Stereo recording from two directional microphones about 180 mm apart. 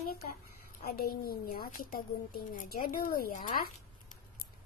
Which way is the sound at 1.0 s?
55° left (ahead or behind).